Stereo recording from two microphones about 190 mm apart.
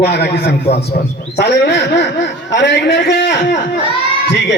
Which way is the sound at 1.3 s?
60° left (ahead or behind).